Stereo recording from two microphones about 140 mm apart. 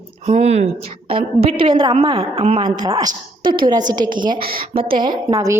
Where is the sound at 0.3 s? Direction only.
50° right (ahead or behind); by 2.0 s 30° right (ahead or behind).